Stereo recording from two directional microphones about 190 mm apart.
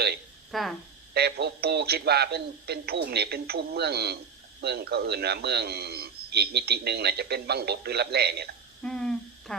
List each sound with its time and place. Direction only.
0.5 s speech: centre (ahead or behind)
1.1 s a man's voice: 60° right (ahead or behind)
8.8 s a sound: 5° left (ahead or behind)